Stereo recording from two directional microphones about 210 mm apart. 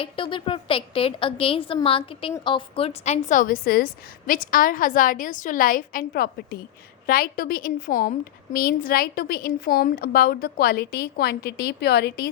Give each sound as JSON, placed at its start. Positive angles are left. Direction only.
{"t": 0.0, "sound": "a woman's voice", "side_deg": 25}